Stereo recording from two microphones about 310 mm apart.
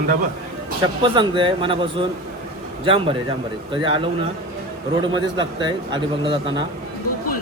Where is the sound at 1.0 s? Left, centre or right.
Centre.